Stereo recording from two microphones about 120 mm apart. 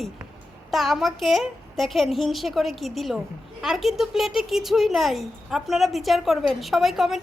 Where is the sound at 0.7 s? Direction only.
Centre (ahead or behind).